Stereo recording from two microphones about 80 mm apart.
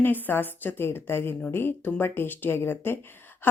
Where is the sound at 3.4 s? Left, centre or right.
Left.